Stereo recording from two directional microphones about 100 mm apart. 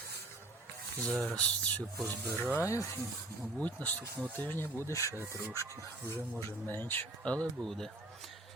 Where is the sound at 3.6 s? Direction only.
15° left (ahead or behind).